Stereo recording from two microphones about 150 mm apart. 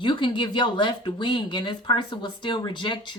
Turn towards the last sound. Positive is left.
turn(degrees=30)  # may be behind; listen again after turning